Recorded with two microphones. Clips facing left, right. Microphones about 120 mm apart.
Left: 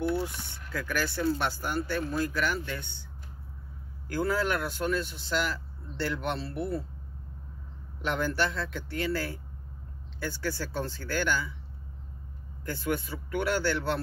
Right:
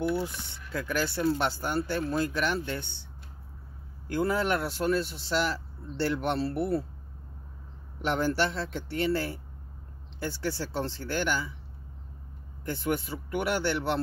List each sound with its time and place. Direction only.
0.1 s speech: 25° right (ahead or behind)
4.1 s speech: 20° right (ahead or behind); by 6.8 s 40° right (ahead or behind)
8.0 s speech: 30° right (ahead or behind)
12.6 s speech: 25° right (ahead or behind)